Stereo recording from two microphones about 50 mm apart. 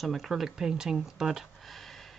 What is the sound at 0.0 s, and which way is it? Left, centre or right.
Speech, centre.